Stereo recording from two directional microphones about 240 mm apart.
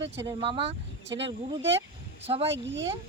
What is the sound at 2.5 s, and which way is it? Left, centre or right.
Speech, right.